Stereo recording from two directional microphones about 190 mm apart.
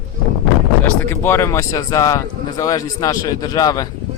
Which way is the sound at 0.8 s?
10° left (ahead or behind).